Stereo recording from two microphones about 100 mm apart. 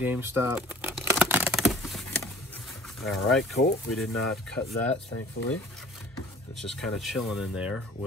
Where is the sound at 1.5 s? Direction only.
Centre (ahead or behind).